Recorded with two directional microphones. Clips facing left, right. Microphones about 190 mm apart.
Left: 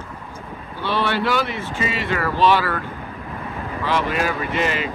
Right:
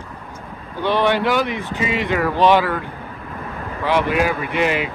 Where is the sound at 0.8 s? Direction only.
15° right (ahead or behind).